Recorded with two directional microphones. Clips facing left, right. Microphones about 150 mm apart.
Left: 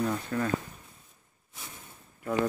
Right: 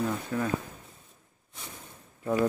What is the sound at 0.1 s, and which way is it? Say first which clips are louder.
Speech: even; 5° right (ahead or behind).